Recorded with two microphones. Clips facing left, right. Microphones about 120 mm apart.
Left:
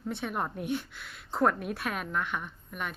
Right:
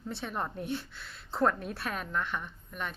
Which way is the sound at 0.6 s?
30° right (ahead or behind).